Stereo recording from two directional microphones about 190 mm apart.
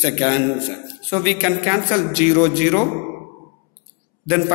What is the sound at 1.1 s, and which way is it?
A man's voice, 10° right (ahead or behind).